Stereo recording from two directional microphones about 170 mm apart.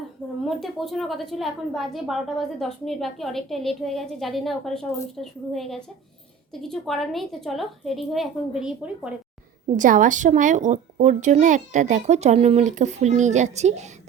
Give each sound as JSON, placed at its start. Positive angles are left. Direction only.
{"t": 0.4, "sound": "a woman's voice", "side_deg": 0}
{"t": 9.7, "sound": "speech", "side_deg": -50}